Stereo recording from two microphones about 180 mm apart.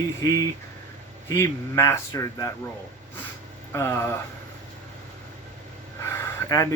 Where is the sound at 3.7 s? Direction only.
15° left (ahead or behind).